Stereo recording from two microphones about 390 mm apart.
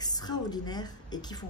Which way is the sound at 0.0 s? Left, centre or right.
Centre.